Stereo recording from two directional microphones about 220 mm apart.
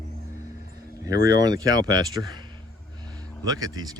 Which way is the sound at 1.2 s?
15° right (ahead or behind).